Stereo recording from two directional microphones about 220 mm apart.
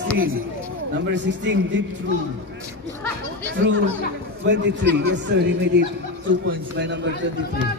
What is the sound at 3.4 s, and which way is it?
A man's voice, 55° right (ahead or behind).